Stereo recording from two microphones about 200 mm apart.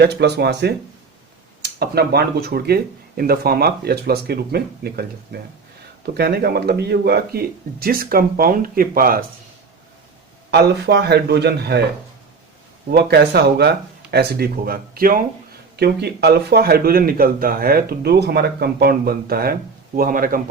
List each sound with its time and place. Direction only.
0.0 s a man's voice: 55° right (ahead or behind)
10.5 s a man's voice: 55° right (ahead or behind)
12.9 s speech: 55° right (ahead or behind)